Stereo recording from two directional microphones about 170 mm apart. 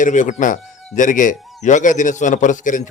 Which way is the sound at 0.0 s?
45° left (ahead or behind).